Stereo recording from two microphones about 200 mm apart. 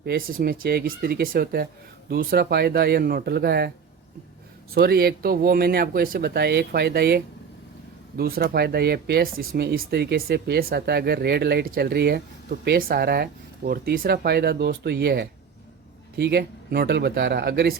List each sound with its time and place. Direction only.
0.0 s speech: 50° right (ahead or behind)
4.7 s speech: 50° right (ahead or behind)